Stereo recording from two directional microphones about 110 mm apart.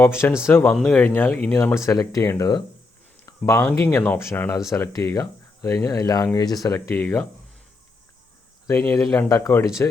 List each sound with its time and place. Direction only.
0.0 s speech: 25° left (ahead or behind)
3.2 s a sound: 25° left (ahead or behind)
3.6 s speech: 20° left (ahead or behind)
8.6 s speech: 25° left (ahead or behind)